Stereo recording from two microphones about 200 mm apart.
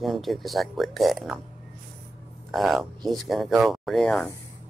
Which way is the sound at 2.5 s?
Centre (ahead or behind).